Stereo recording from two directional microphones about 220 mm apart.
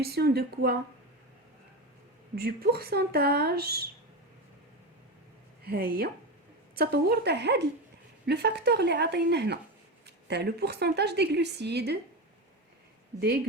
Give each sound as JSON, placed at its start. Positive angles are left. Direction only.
{"t": 0.0, "sound": "a woman's voice", "side_deg": -45}
{"t": 2.3, "sound": "a woman's voice", "side_deg": -45}
{"t": 5.6, "sound": "a woman's voice", "side_deg": -45}
{"t": 13.1, "sound": "a woman's voice", "side_deg": -45}